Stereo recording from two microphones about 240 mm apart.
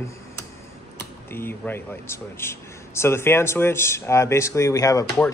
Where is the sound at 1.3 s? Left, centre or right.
Centre.